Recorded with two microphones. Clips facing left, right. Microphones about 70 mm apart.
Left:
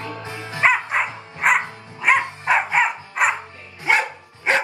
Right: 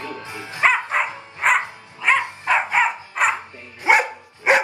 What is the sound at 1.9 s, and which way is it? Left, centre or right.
Music, centre.